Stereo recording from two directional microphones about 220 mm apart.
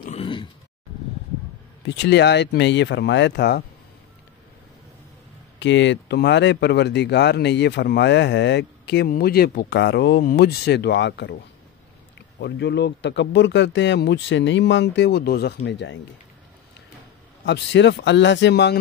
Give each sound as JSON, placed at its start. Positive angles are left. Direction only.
{"t": 0.1, "sound": "grunt", "side_deg": 25}
{"t": 2.0, "sound": "speech", "side_deg": 50}
{"t": 5.6, "sound": "speech", "side_deg": 55}
{"t": 17.5, "sound": "speech", "side_deg": 55}